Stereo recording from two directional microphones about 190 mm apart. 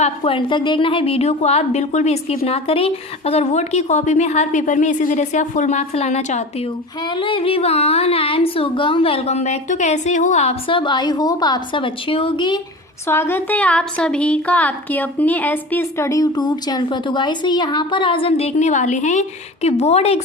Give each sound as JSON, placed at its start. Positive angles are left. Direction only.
{"t": 0.0, "sound": "a woman's voice", "side_deg": 25}
{"t": 13.1, "sound": "a woman's voice", "side_deg": 10}